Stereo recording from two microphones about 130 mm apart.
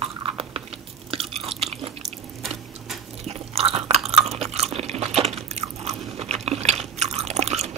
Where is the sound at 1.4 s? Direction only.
50° right (ahead or behind).